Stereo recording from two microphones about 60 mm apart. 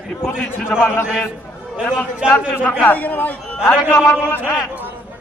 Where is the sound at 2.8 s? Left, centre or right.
Left.